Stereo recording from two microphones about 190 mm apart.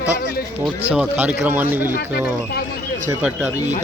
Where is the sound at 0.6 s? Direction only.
5° right (ahead or behind).